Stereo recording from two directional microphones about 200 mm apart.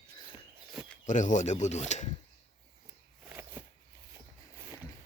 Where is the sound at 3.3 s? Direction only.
10° right (ahead or behind).